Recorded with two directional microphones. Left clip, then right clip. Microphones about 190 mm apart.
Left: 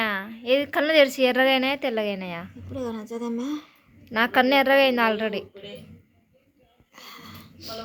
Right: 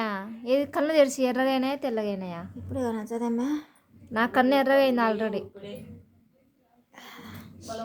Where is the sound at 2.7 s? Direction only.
10° right (ahead or behind).